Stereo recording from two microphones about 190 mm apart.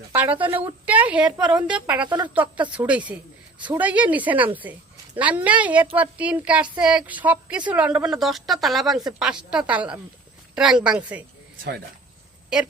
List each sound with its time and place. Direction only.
0.1 s a woman's voice: 10° right (ahead or behind)
2.0 s speech: 25° right (ahead or behind)
2.3 s a woman's voice: 10° right (ahead or behind)